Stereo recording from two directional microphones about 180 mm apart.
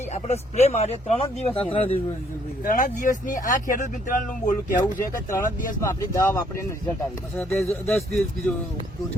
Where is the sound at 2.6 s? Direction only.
50° left (ahead or behind).